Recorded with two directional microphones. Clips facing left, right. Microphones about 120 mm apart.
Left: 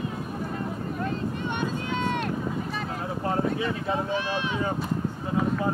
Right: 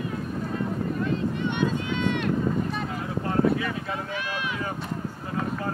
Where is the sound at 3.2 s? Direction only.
25° left (ahead or behind).